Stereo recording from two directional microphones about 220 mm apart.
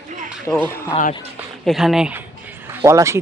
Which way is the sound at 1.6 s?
Centre (ahead or behind).